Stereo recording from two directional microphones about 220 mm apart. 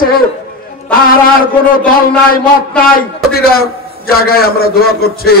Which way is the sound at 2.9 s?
45° left (ahead or behind).